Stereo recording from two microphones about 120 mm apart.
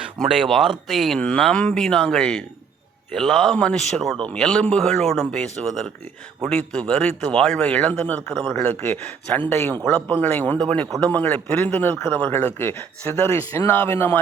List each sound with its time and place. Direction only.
0.0 s a man's voice: 5° right (ahead or behind); by 14.2 s 20° left (ahead or behind)